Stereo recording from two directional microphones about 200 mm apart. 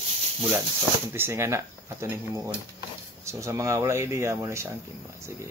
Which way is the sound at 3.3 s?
15° right (ahead or behind).